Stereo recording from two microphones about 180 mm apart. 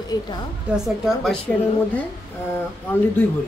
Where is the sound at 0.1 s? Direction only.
20° left (ahead or behind).